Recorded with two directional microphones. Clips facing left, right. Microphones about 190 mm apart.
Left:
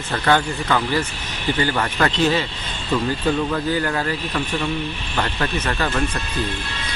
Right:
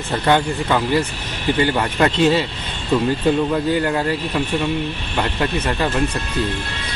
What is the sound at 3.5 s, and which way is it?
Speech, 20° right (ahead or behind).